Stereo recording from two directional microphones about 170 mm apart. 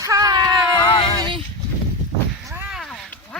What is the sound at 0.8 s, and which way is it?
Speech, 30° left (ahead or behind).